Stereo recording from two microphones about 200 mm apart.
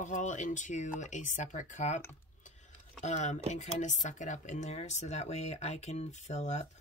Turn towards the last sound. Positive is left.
turn(degrees=35)  # may be behind; listen again after turning